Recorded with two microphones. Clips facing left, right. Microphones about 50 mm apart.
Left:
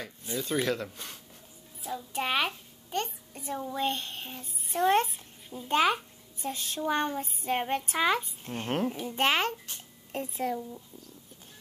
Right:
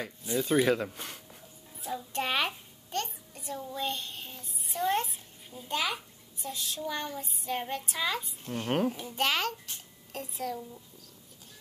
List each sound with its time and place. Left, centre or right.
0.4 s speech: centre
1.8 s a child's voice: centre
3.3 s speech: left
8.6 s a child's voice: centre
9.1 s a child's voice: left